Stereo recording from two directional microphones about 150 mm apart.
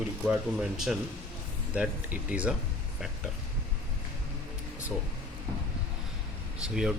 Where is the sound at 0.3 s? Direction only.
5° right (ahead or behind).